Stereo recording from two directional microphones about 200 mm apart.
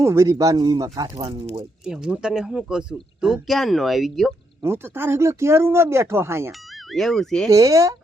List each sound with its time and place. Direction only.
0.0 s speech: 15° right (ahead or behind)
1.8 s speech: 5° right (ahead or behind)
4.6 s speech: 10° right (ahead or behind)
6.9 s speech: centre (ahead or behind)
7.5 s speech: 15° right (ahead or behind)